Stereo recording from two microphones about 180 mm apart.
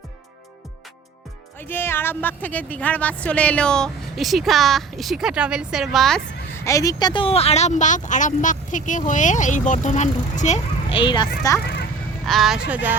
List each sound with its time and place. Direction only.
1.5 s speech: 10° left (ahead or behind)
6.7 s speech: 20° left (ahead or behind); by 11.0 s 40° left (ahead or behind)
11.0 s speech: 25° left (ahead or behind)
12.2 s speech: centre (ahead or behind)